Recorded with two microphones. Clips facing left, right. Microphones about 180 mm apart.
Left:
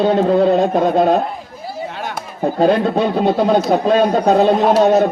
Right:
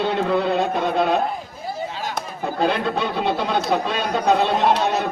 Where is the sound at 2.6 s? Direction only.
40° left (ahead or behind).